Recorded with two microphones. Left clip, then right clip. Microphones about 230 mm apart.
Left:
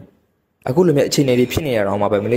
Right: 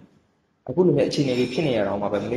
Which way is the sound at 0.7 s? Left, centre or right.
Left.